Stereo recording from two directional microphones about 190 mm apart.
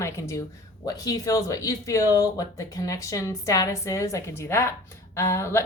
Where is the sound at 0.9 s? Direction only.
20° left (ahead or behind).